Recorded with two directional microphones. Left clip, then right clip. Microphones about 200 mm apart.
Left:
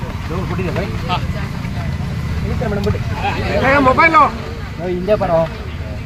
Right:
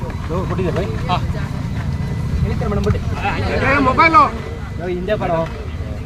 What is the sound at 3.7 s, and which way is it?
Speech, 40° left (ahead or behind).